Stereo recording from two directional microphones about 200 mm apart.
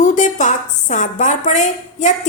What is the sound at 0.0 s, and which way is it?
A woman's voice, 40° left (ahead or behind).